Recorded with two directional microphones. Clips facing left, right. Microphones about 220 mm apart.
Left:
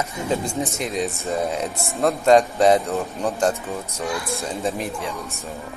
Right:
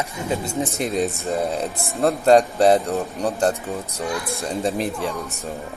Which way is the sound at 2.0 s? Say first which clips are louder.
Right 1 dB; 35° right (ahead or behind).